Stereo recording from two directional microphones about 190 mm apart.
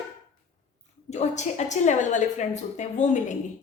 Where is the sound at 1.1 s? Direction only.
35° left (ahead or behind).